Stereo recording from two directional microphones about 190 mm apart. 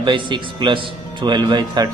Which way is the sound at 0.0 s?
25° right (ahead or behind).